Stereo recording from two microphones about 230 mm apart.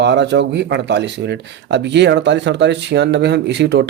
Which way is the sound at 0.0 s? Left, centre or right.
Right.